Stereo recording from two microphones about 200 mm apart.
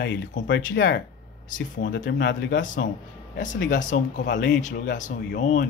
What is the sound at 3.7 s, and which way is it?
Speech, 40° left (ahead or behind).